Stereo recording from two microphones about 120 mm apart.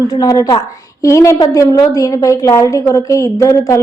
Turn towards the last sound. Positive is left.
turn(degrees=25)  # may be behind; listen again after turning